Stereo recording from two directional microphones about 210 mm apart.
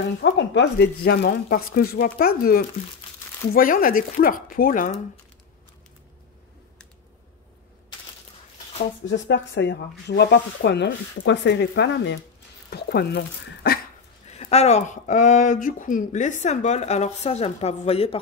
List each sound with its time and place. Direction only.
0.2 s speech: 55° left (ahead or behind); by 5.0 s 35° left (ahead or behind)
9.0 s speech: 60° left (ahead or behind)
12.6 s a sound: 50° left (ahead or behind)
14.4 s speech: 30° left (ahead or behind)